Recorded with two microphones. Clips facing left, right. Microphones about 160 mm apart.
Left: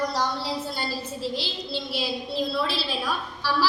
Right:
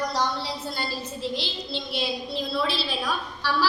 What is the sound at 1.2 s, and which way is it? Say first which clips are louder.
A woman's voice: right 1 dB; 5° left (ahead or behind).